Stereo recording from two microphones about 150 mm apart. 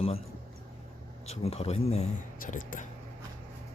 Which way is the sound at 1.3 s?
45° left (ahead or behind).